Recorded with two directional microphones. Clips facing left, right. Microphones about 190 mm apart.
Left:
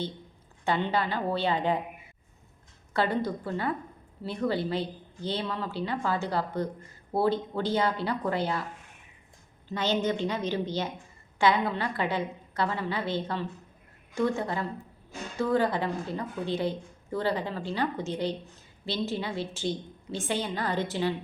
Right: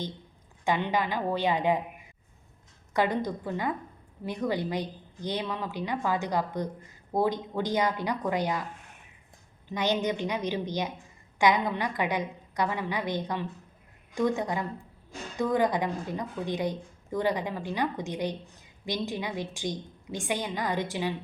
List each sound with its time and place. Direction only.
0.6 s a woman's voice: 15° right (ahead or behind)
2.9 s a woman's voice: 15° right (ahead or behind)
9.6 s a woman's voice: 15° right (ahead or behind)